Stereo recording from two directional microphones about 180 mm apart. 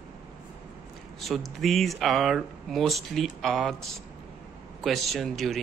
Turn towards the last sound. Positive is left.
turn(degrees=0)  # may be behind; listen again after turning